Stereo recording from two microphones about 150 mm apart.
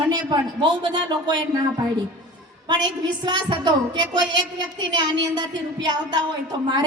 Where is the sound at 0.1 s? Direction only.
30° right (ahead or behind).